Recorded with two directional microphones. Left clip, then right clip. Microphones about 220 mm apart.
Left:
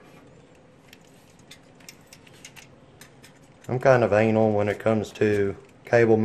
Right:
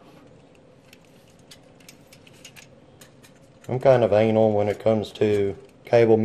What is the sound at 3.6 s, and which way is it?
Speech, 5° left (ahead or behind).